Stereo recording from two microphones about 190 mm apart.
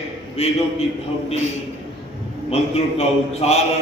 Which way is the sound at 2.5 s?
30° left (ahead or behind).